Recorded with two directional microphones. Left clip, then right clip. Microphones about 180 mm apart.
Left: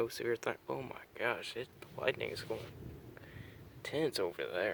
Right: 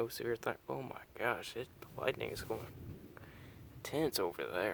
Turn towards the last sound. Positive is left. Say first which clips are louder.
# left 1 dB
turn(degrees=-20)  # may be behind; listen again after turning